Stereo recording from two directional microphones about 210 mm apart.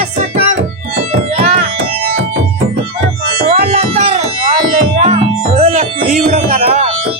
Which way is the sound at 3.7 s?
30° right (ahead or behind).